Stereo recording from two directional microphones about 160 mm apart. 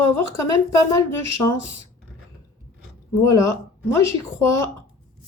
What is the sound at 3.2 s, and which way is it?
Speech, 20° left (ahead or behind).